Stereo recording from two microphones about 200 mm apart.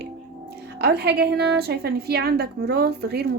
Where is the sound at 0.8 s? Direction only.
55° right (ahead or behind).